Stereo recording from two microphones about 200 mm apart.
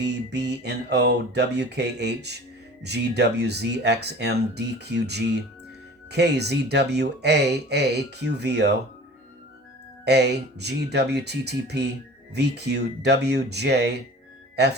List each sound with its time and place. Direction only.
0.0 s speech: 55° right (ahead or behind)
10.1 s speech: 55° right (ahead or behind)